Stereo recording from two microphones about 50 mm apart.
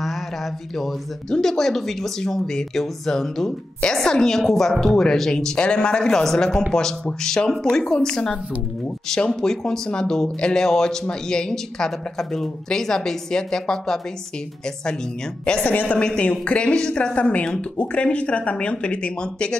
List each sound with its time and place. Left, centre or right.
1.3 s speech: centre
15.6 s a woman's voice: left
16.0 s speech: left